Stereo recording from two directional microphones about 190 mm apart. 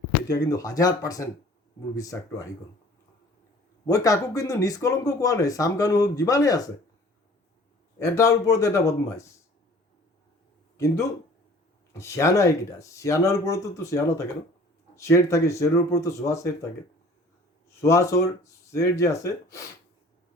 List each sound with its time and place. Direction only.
0.3 s speech: 20° left (ahead or behind)
3.8 s speech: 20° left (ahead or behind)
7.9 s speech: 15° left (ahead or behind)
10.8 s speech: 15° left (ahead or behind)
17.7 s speech: 15° left (ahead or behind)